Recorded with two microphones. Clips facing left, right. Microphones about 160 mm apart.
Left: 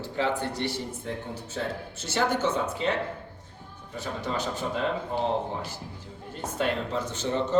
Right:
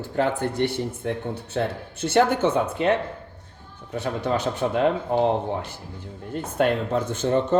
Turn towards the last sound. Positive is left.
turn(degrees=-50)  # may be behind; listen again after turning